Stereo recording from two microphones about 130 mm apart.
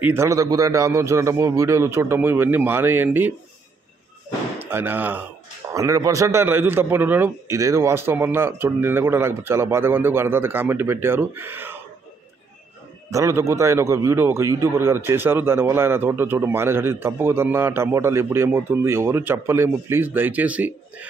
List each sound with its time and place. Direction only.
0.0 s a man's voice: 20° right (ahead or behind)
4.6 s speech: 15° right (ahead or behind)
5.8 s a man's voice: 25° right (ahead or behind)
13.1 s a man's voice: 25° right (ahead or behind)